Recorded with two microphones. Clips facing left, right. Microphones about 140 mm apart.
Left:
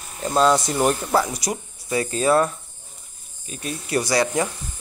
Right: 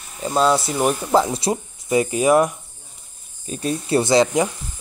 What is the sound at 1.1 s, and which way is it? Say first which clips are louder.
Speech: right 4 dB; 20° right (ahead or behind).